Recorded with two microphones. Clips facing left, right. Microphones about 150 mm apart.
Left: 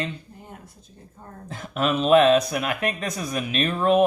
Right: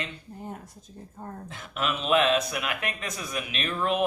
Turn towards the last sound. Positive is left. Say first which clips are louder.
# left 8 dB
turn(degrees=40)  # may be behind; listen again after turning